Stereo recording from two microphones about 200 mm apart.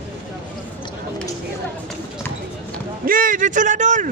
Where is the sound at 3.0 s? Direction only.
45° right (ahead or behind).